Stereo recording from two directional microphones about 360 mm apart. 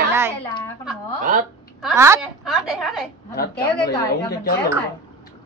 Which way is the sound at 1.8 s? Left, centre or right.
Centre.